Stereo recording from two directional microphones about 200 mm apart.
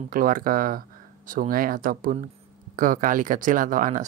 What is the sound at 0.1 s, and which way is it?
Speech, 45° right (ahead or behind).